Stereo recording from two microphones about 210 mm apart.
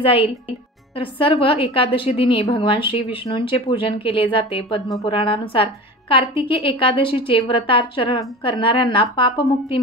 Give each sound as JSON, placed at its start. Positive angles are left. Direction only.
{"t": 0.0, "sound": "a woman's voice", "side_deg": 25}